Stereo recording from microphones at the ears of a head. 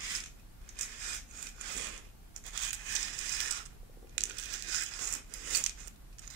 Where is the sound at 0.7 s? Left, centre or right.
Right.